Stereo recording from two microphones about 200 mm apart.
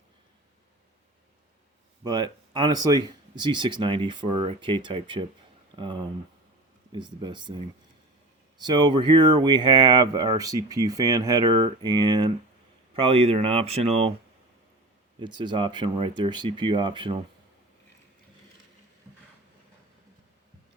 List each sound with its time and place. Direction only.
2.0 s speech: 20° right (ahead or behind)
15.2 s speech: 25° right (ahead or behind)